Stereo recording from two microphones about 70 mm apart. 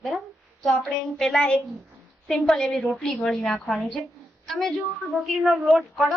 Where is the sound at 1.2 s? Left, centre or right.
Centre.